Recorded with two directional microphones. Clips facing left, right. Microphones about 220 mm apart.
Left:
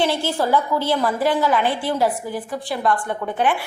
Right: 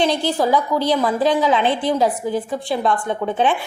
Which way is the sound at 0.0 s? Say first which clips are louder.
Right 2 dB; 15° right (ahead or behind).